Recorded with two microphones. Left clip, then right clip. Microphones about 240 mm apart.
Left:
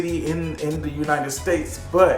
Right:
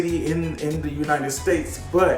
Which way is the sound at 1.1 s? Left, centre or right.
Centre.